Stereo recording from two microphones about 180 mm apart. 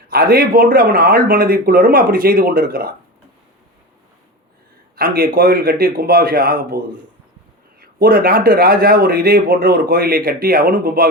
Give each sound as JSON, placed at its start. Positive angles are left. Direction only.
{"t": 0.1, "sound": "speech", "side_deg": -55}
{"t": 4.9, "sound": "speech", "side_deg": -55}